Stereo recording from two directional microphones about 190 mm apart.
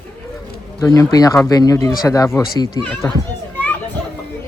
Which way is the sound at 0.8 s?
15° left (ahead or behind).